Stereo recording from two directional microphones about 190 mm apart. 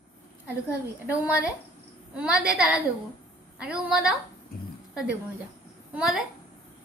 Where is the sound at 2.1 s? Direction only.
5° right (ahead or behind).